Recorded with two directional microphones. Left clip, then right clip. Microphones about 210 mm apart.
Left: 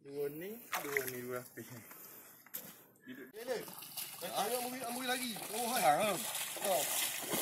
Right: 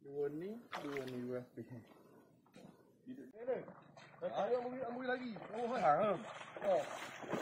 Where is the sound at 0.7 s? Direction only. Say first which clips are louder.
Left 9 dB; 25° right (ahead or behind).